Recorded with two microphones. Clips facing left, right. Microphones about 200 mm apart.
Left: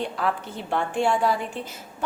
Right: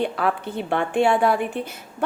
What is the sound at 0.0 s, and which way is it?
A woman's voice, 60° right (ahead or behind).